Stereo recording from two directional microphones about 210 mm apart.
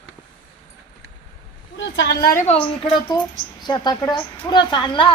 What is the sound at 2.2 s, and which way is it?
Speech, 45° left (ahead or behind).